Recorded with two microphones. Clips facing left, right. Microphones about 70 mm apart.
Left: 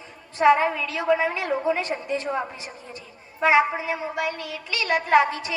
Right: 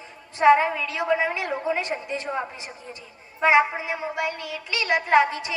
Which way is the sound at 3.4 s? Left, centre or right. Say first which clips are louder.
Even; right.